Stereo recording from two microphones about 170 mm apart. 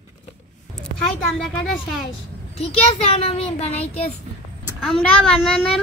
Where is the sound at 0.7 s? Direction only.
5° left (ahead or behind).